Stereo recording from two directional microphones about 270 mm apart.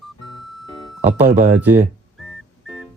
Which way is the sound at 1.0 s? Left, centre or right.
Centre.